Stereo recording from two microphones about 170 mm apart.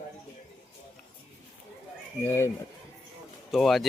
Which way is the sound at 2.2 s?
15° left (ahead or behind).